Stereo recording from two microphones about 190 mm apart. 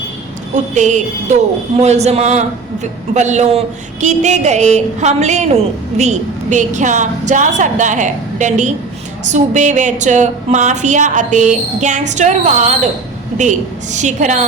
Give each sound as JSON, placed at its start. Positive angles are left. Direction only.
{"t": 0.5, "sound": "a woman's voice", "side_deg": -40}